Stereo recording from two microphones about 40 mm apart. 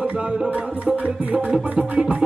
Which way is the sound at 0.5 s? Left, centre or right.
Right.